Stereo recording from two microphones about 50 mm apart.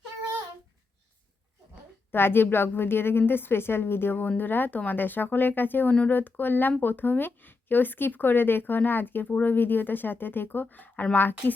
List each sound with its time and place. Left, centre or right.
2.1 s speech: left